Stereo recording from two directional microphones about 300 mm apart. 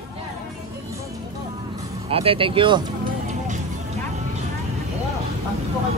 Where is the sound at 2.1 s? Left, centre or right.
Centre.